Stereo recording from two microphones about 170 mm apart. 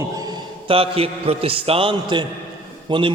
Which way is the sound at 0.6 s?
35° right (ahead or behind).